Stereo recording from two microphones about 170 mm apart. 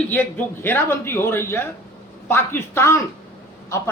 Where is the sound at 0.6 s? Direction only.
15° left (ahead or behind).